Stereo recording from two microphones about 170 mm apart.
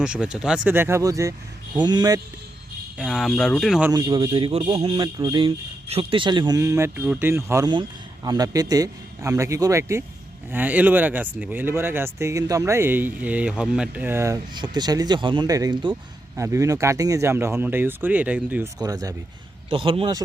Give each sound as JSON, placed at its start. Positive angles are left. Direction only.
{"t": 0.0, "sound": "speech", "side_deg": -5}
{"t": 3.0, "sound": "speech", "side_deg": 0}
{"t": 3.9, "sound": "speech", "side_deg": -25}
{"t": 7.7, "sound": "speech", "side_deg": -25}
{"t": 14.5, "sound": "speech", "side_deg": -25}
{"t": 16.3, "sound": "speech", "side_deg": -15}
{"t": 18.8, "sound": "speech", "side_deg": -20}
{"t": 19.7, "sound": "speech", "side_deg": -35}